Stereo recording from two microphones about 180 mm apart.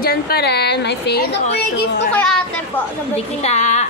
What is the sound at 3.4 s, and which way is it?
Speech, 40° left (ahead or behind).